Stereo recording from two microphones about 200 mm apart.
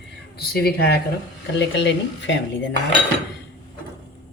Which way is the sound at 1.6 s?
60° left (ahead or behind).